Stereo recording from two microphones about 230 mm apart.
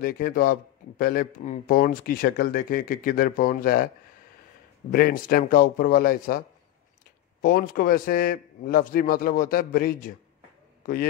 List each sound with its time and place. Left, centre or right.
0.0 s speech: left
4.9 s speech: left
7.4 s speech: left
10.8 s a sound: left